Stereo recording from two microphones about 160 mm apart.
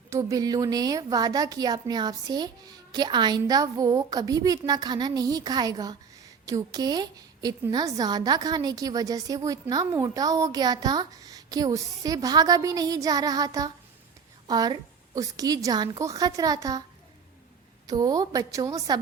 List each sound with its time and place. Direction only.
0.1 s a woman's voice: 20° right (ahead or behind)
17.8 s a woman's voice: 25° right (ahead or behind)